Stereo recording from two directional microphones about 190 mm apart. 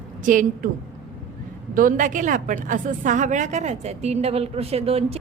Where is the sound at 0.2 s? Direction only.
45° right (ahead or behind).